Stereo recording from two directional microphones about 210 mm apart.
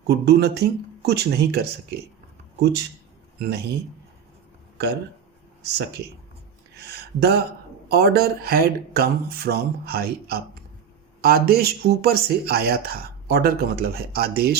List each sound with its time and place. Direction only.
0.1 s a man's voice: 50° right (ahead or behind)
6.7 s a sound: 50° right (ahead or behind)
7.9 s speech: 50° right (ahead or behind)